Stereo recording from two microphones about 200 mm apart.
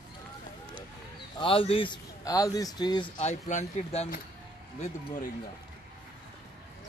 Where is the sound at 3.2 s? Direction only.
35° left (ahead or behind).